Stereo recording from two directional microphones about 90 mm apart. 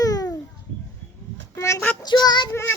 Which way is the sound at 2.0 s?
50° left (ahead or behind).